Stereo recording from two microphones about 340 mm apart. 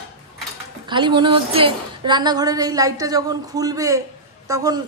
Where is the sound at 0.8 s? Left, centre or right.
Centre.